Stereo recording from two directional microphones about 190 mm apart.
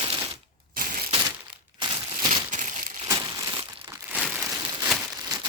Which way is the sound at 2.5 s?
40° right (ahead or behind).